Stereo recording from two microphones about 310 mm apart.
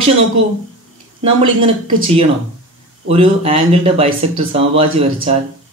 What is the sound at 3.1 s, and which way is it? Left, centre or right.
Speech, centre.